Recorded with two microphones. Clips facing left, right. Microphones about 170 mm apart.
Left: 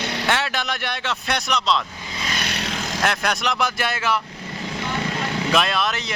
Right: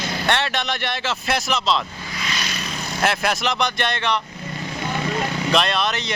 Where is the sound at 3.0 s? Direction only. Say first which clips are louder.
Right 2 dB; 5° right (ahead or behind).